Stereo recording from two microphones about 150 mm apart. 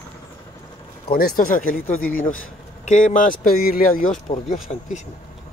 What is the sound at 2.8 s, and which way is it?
Speech, 55° left (ahead or behind).